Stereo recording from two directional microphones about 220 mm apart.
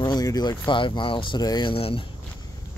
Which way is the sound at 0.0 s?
15° left (ahead or behind).